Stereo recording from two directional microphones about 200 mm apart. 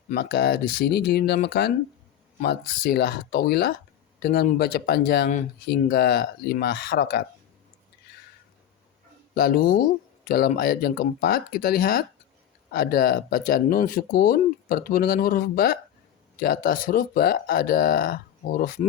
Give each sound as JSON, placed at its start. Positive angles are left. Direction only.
{"t": 0.1, "sound": "speech", "side_deg": 55}
{"t": 9.3, "sound": "speech", "side_deg": 45}